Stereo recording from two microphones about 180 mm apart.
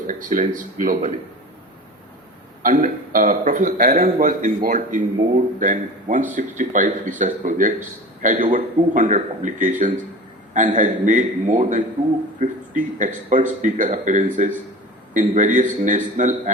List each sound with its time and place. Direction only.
0.1 s a man's voice: 45° right (ahead or behind)
2.6 s a man's voice: 50° right (ahead or behind)